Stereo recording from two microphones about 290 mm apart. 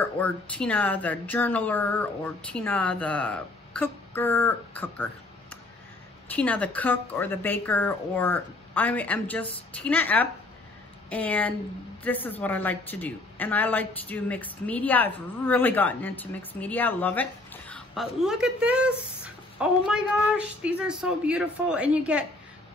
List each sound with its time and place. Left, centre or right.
0.0 s speech: centre